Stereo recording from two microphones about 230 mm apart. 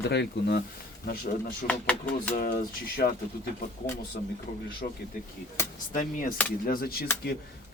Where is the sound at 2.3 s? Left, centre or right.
Left.